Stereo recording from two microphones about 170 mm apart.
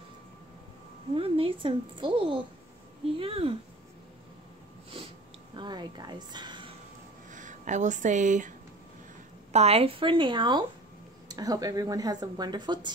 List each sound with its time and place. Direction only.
1.1 s a woman's voice: 35° right (ahead or behind)
5.6 s speech: 25° right (ahead or behind)
7.2 s a woman's voice: 45° right (ahead or behind); by 12.9 s 25° right (ahead or behind)